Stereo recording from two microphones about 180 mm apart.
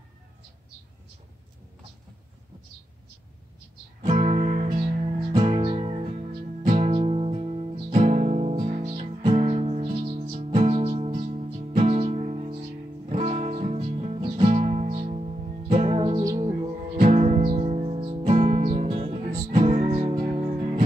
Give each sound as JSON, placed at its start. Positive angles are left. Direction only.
{"t": 4.0, "sound": "music", "side_deg": -40}
{"t": 5.3, "sound": "music", "side_deg": -25}
{"t": 18.8, "sound": "music", "side_deg": -30}